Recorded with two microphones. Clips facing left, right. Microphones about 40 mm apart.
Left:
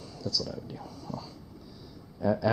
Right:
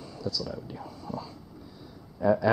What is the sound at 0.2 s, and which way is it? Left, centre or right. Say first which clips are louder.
Speech: right 1 dB; centre.